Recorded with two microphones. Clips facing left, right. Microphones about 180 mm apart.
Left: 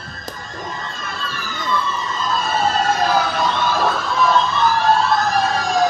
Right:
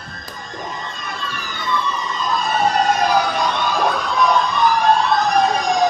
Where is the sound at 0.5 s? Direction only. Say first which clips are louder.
Right 1 dB; 20° right (ahead or behind).